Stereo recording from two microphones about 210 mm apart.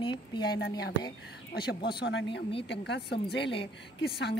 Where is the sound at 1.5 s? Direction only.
50° left (ahead or behind).